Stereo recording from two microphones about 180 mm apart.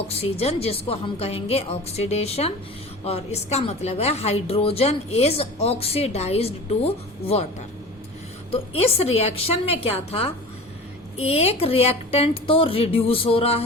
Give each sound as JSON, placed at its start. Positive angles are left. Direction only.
{"t": 0.0, "sound": "a woman's voice", "side_deg": 35}
{"t": 8.5, "sound": "a woman's voice", "side_deg": 35}